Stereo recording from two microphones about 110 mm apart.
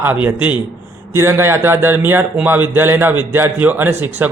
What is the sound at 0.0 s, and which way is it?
A man's voice, 20° right (ahead or behind).